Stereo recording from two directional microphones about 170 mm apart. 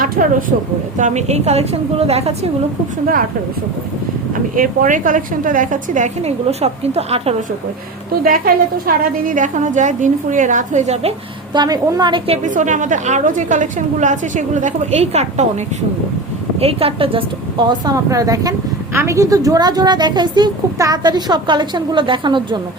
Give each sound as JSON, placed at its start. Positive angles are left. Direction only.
{"t": 0.0, "sound": "a woman's voice", "side_deg": -55}
{"t": 4.5, "sound": "a woman's voice", "side_deg": -50}
{"t": 8.2, "sound": "a woman's voice", "side_deg": -55}
{"t": 11.5, "sound": "a woman's voice", "side_deg": -25}
{"t": 12.5, "sound": "a woman's voice", "side_deg": -50}
{"t": 16.6, "sound": "a woman's voice", "side_deg": -35}